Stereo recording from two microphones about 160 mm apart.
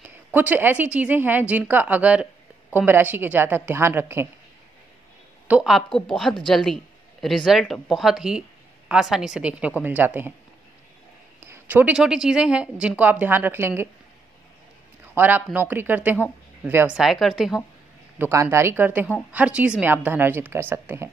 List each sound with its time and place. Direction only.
0.0 s speech: 10° right (ahead or behind)
5.5 s speech: 5° right (ahead or behind)
11.4 s speech: 15° right (ahead or behind)
15.1 s speech: 10° right (ahead or behind)
18.2 s speech: 15° right (ahead or behind)